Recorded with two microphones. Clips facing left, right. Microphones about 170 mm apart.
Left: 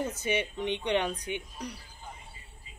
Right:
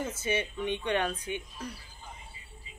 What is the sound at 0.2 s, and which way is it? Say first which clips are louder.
Speech: left 1 dB; 15° left (ahead or behind).